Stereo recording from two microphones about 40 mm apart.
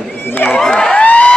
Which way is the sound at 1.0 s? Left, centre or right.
Left.